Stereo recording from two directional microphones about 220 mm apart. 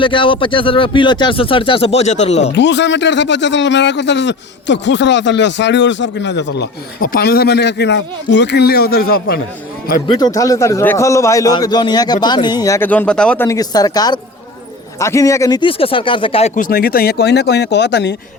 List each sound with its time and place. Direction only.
0.0 s speech: 20° left (ahead or behind)
2.5 s a man's voice: 55° left (ahead or behind)
10.1 s a man's voice: 20° left (ahead or behind)
16.6 s a man's voice: 40° left (ahead or behind)